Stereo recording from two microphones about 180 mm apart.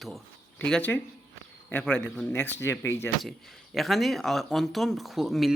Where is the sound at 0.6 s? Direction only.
10° left (ahead or behind).